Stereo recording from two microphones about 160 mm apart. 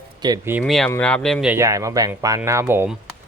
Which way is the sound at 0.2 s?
25° right (ahead or behind).